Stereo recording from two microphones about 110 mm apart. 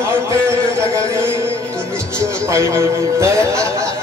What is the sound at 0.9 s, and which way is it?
Music, 25° right (ahead or behind).